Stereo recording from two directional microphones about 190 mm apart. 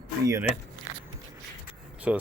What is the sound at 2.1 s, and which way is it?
Speech, 5° right (ahead or behind).